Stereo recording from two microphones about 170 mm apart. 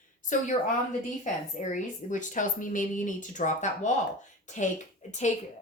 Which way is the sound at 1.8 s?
45° left (ahead or behind).